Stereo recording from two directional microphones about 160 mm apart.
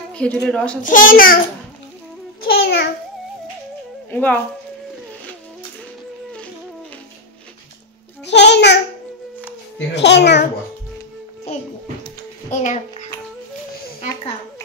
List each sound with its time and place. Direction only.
0.1 s speech: 5° left (ahead or behind)
0.8 s a child's voice: 60° left (ahead or behind)
2.4 s a child's voice: 85° left
4.1 s speech: 10° left (ahead or behind)
8.3 s a child's voice: 90° left
9.9 s a child's voice: 90° left
12.4 s a child's voice: 50° left (ahead or behind)